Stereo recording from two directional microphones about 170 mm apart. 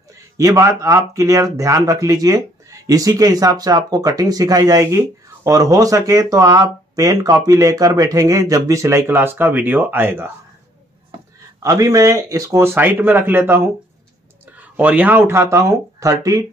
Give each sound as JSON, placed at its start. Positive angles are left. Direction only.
{"t": 0.1, "sound": "speech", "side_deg": -20}
{"t": 11.6, "sound": "speech", "side_deg": -20}